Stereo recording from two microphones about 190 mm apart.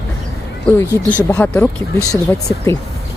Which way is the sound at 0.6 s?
15° left (ahead or behind).